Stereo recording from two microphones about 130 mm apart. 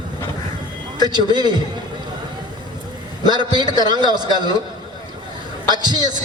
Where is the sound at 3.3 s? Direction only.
35° right (ahead or behind).